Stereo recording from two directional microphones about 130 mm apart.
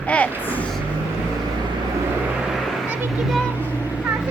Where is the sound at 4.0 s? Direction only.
10° right (ahead or behind).